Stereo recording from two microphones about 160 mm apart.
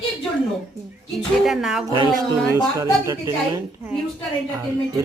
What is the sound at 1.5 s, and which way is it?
Speech, 5° right (ahead or behind).